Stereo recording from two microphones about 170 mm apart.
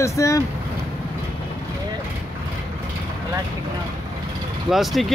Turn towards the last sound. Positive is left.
turn(degrees=0)  # may be behind; listen again after turning